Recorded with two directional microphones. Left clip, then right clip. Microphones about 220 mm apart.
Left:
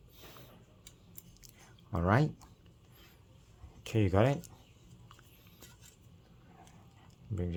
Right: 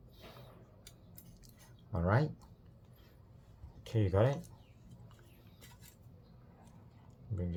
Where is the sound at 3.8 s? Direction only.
35° left (ahead or behind).